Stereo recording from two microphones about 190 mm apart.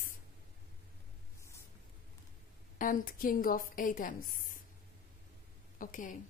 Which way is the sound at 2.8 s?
45° left (ahead or behind).